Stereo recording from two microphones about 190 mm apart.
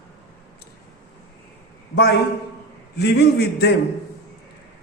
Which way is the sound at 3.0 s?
60° left (ahead or behind).